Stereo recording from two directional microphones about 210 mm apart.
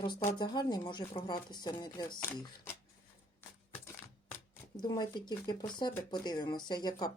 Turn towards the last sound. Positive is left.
turn(degrees=20)  # may be behind; listen again after turning